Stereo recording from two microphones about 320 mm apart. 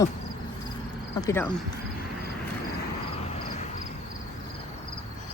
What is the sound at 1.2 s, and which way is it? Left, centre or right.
Speech, centre.